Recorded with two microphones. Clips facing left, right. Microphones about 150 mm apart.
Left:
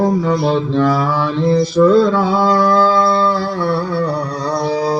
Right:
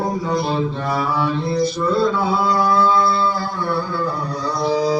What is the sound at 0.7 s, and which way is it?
Mantra, 90° left.